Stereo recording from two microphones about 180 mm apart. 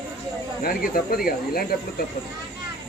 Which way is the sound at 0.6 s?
50° left (ahead or behind).